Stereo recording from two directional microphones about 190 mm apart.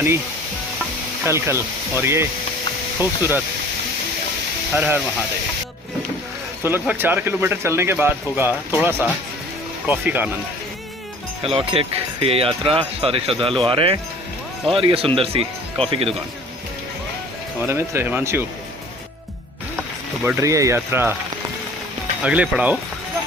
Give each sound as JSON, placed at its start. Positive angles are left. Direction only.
{"t": 1.2, "sound": "speech", "side_deg": -15}
{"t": 4.7, "sound": "speech", "side_deg": -10}
{"t": 6.6, "sound": "speech", "side_deg": -10}
{"t": 11.4, "sound": "speech", "side_deg": -30}
{"t": 17.7, "sound": "speech", "side_deg": -15}
{"t": 20.2, "sound": "speech", "side_deg": -15}
{"t": 22.2, "sound": "speech", "side_deg": -5}